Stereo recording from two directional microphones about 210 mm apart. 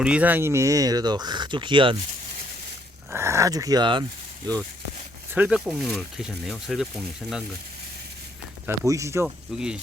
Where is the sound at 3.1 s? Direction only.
10° right (ahead or behind).